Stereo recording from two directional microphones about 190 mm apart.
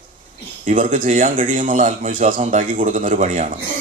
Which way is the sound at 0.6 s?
45° right (ahead or behind).